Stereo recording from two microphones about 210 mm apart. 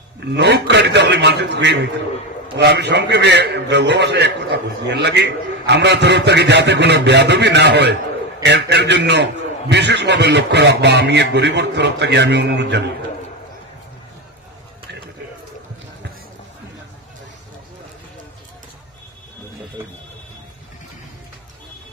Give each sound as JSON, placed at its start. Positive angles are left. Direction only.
{"t": 0.3, "sound": "a man's voice", "side_deg": -55}